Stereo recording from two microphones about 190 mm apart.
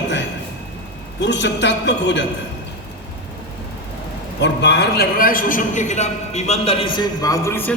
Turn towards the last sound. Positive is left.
turn(degrees=15)  # may be behind; listen again after turning